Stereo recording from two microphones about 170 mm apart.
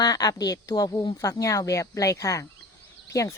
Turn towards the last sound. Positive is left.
turn(degrees=20)  # may be behind; listen again after turning